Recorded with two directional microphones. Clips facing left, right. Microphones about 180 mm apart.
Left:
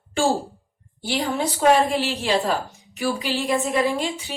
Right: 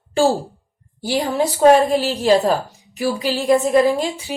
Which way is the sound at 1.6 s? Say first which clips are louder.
Right 6 dB; 40° right (ahead or behind).